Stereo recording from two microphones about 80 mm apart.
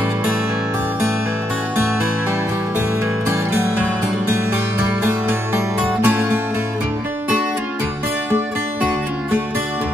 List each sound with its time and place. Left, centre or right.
6.0 s music: right